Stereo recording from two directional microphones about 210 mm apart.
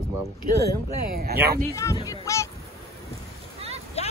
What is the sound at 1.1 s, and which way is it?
Speech, 45° right (ahead or behind).